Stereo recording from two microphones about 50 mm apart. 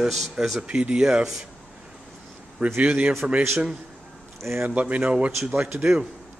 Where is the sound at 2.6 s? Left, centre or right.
Right.